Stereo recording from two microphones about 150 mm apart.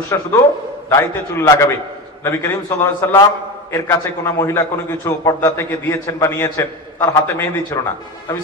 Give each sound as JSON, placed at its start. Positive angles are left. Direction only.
{"t": 0.1, "sound": "a man's voice", "side_deg": 20}